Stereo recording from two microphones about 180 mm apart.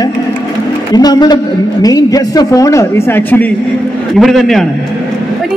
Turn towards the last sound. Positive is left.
turn(degrees=0)  # may be behind; listen again after turning